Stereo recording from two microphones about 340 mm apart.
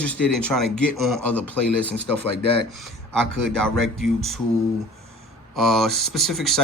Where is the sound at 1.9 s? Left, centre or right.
Right.